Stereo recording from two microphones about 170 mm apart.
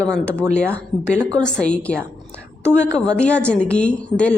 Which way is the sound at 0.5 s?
5° left (ahead or behind).